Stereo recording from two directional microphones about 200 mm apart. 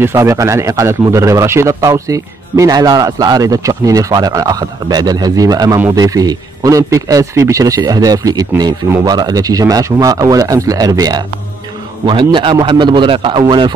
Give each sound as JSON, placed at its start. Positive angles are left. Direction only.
{"t": 0.0, "sound": "a man's voice", "side_deg": -15}